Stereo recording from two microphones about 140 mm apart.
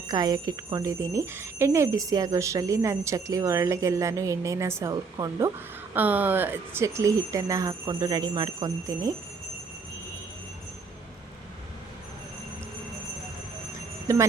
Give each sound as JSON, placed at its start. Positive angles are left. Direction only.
{"t": 0.1, "sound": "speech", "side_deg": -30}